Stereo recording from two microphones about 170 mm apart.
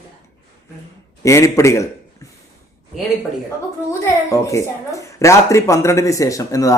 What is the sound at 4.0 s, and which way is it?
Speech, 20° left (ahead or behind).